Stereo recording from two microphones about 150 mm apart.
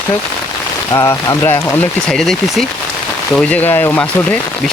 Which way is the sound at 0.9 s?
15° left (ahead or behind).